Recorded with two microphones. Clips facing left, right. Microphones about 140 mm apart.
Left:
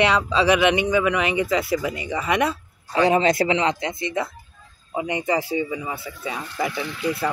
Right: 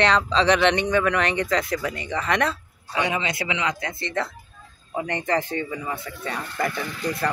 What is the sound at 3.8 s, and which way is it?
Speech, 15° left (ahead or behind).